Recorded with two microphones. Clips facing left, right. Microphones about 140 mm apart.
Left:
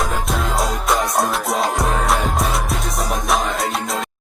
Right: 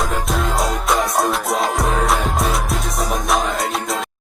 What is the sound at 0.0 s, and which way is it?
Music, centre (ahead or behind).